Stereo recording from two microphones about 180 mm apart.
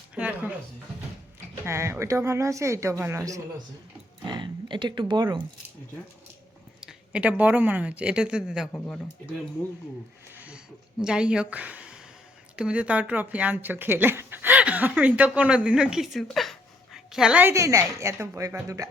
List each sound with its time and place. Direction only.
0.2 s music: 5° right (ahead or behind)
1.6 s speech: 15° right (ahead or behind)
6.8 s speech: 5° right (ahead or behind)
10.3 s a sound: 5° right (ahead or behind)
11.0 s a woman's voice: 5° right (ahead or behind)